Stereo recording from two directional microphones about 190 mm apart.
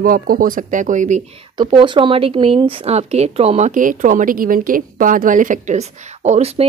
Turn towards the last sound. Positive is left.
turn(degrees=-35)  # may be behind; listen again after turning